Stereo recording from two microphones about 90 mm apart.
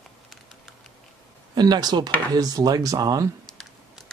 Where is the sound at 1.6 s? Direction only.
50° right (ahead or behind).